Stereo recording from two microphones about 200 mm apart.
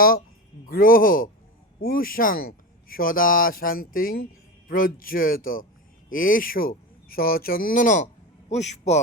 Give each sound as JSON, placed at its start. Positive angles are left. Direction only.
{"t": 0.6, "sound": "a man's voice", "side_deg": 45}